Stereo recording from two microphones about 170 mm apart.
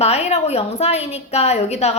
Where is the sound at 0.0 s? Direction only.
40° left (ahead or behind).